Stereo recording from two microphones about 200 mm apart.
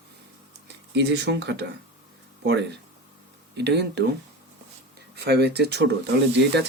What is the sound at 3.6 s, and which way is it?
Speech, 60° right (ahead or behind).